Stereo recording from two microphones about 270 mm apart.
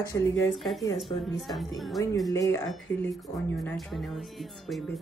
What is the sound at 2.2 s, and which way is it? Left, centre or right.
Speech, centre.